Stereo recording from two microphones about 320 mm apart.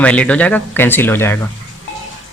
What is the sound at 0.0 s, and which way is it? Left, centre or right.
Speech, centre.